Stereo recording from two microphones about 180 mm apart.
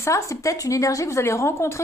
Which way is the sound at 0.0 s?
15° left (ahead or behind).